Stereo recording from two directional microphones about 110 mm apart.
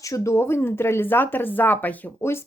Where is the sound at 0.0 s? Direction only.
25° left (ahead or behind).